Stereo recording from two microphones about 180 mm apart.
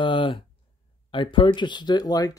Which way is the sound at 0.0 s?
30° left (ahead or behind).